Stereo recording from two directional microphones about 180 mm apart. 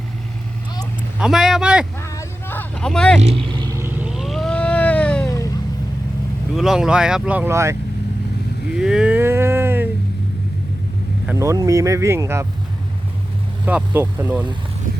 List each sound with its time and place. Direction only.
1.2 s speech: centre (ahead or behind)
2.0 s vehicle: 15° left (ahead or behind)
3.5 s cat: 20° right (ahead or behind); by 5.3 s 5° left (ahead or behind)
6.6 s speech: 5° right (ahead or behind)
8.7 s a sound: 5° right (ahead or behind)
11.3 s speech: 15° right (ahead or behind)
13.7 s speech: 10° right (ahead or behind)